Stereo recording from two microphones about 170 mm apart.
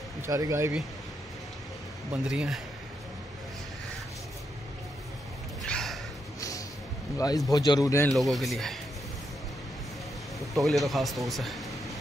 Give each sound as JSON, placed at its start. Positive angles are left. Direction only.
{"t": 0.3, "sound": "speech", "side_deg": -20}
{"t": 2.2, "sound": "speech", "side_deg": -5}
{"t": 5.6, "sound": "a sound", "side_deg": 0}
{"t": 7.2, "sound": "a man's voice", "side_deg": 20}
{"t": 8.2, "sound": "speech", "side_deg": 0}
{"t": 10.5, "sound": "speech", "side_deg": 0}